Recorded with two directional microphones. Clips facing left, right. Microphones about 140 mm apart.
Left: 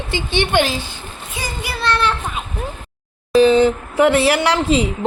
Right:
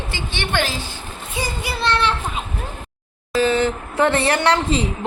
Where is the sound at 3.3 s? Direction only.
15° left (ahead or behind).